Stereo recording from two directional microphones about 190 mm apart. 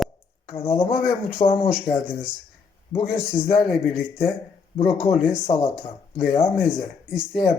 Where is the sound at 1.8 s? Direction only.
25° left (ahead or behind).